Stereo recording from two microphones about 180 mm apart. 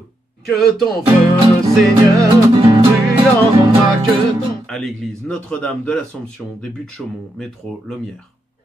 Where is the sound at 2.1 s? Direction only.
20° right (ahead or behind).